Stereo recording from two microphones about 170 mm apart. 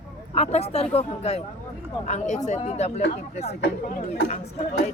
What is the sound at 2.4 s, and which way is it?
Speech, 40° left (ahead or behind).